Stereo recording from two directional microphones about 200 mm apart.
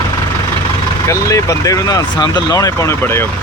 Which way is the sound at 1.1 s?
15° left (ahead or behind).